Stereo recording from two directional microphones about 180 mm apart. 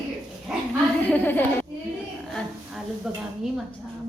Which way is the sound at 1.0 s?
10° left (ahead or behind).